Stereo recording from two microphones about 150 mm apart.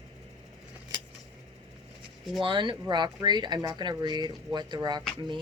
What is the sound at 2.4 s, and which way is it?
Speech, 35° right (ahead or behind).